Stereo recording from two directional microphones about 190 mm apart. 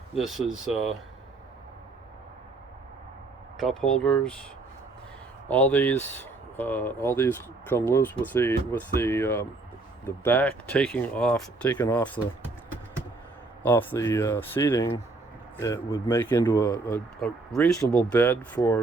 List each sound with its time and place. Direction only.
0.1 s speech: centre (ahead or behind)
3.6 s speech: centre (ahead or behind)
5.5 s speech: 10° left (ahead or behind)
13.6 s speech: 10° left (ahead or behind)
17.2 s speech: 5° left (ahead or behind)